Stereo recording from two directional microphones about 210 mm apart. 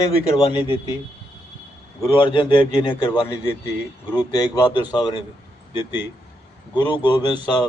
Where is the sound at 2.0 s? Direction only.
25° left (ahead or behind).